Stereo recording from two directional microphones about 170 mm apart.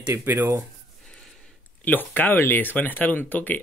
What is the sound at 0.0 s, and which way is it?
Speech, 10° right (ahead or behind).